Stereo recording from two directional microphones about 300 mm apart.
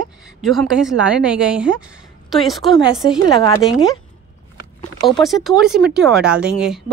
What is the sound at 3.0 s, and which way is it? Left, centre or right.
A woman's voice, centre.